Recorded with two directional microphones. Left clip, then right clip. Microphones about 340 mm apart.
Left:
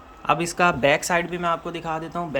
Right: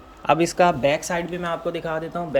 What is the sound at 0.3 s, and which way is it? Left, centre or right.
Speech, centre.